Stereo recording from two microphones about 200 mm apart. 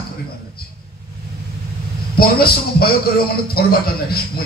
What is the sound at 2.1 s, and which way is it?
A man's voice, 50° left (ahead or behind).